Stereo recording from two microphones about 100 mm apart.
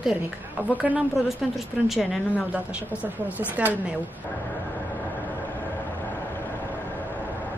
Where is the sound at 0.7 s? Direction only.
15° right (ahead or behind).